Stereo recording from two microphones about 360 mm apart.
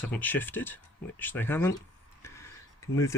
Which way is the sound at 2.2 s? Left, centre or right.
Centre.